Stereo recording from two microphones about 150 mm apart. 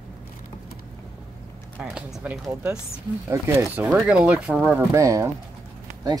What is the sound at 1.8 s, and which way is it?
Speech, 5° right (ahead or behind).